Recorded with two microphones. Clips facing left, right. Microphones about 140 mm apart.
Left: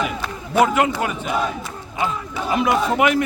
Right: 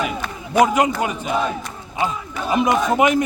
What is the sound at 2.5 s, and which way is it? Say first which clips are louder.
Speech: right 1 dB; 20° right (ahead or behind).